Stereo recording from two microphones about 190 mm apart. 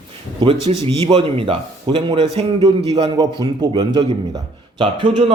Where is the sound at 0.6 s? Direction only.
30° right (ahead or behind).